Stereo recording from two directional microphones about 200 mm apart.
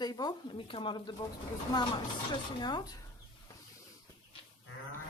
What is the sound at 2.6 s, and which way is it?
Speech, 20° left (ahead or behind).